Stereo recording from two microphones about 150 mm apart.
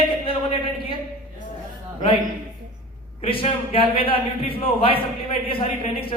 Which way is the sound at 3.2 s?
40° left (ahead or behind).